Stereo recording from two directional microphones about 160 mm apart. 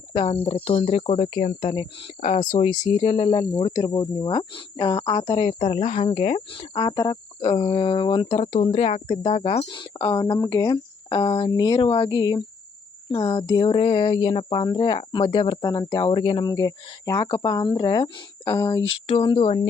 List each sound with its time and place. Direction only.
0.1 s speech: 35° left (ahead or behind)
0.4 s cricket: 35° left (ahead or behind)
1.7 s speech: 25° left (ahead or behind)
2.2 s speech: 45° left (ahead or behind)
2.6 s cricket: 45° left (ahead or behind); by 3.6 s 30° left (ahead or behind)
3.7 s speech: 25° left (ahead or behind)
5.8 s cricket: 40° left (ahead or behind)
8.4 s cricket: 45° left (ahead or behind)
9.6 s speech: 30° left (ahead or behind)
19.0 s cricket: 30° left (ahead or behind)